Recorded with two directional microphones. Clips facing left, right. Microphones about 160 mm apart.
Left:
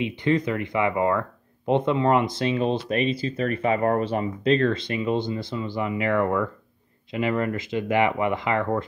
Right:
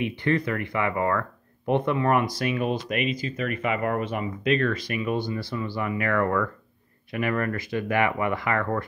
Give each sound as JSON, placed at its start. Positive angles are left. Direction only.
{"t": 0.0, "sound": "speech", "side_deg": 20}